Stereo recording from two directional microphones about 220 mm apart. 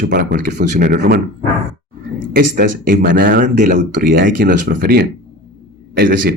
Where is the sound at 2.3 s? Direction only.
40° right (ahead or behind).